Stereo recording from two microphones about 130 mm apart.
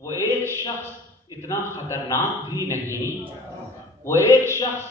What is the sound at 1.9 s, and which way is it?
Speech, 20° left (ahead or behind).